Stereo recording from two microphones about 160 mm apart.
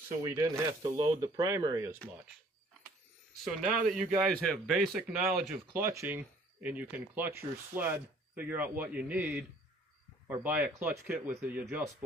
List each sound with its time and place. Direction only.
0.2 s speech: 20° right (ahead or behind)
3.4 s speech: 5° right (ahead or behind)
5.7 s speech: 15° right (ahead or behind)